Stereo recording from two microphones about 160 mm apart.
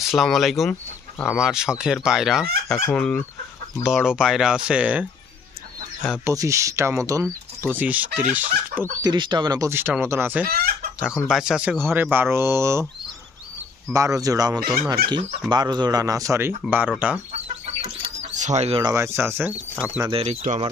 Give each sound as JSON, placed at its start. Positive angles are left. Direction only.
{"t": 0.1, "sound": "speech", "side_deg": 0}
{"t": 2.8, "sound": "speech", "side_deg": 10}
{"t": 3.8, "sound": "speech", "side_deg": -5}
{"t": 6.2, "sound": "speech", "side_deg": -20}
{"t": 9.0, "sound": "speech", "side_deg": -30}
{"t": 10.4, "sound": "chicken", "side_deg": -70}
{"t": 11.2, "sound": "speech", "side_deg": -5}
{"t": 13.9, "sound": "speech", "side_deg": -20}
{"t": 16.6, "sound": "speech", "side_deg": -5}
{"t": 17.5, "sound": "chicken", "side_deg": -40}
{"t": 18.8, "sound": "speech", "side_deg": -20}
{"t": 20.1, "sound": "speech", "side_deg": -40}